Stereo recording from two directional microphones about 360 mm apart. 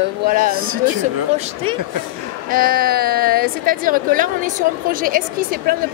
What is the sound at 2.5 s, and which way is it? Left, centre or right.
A woman's voice, right.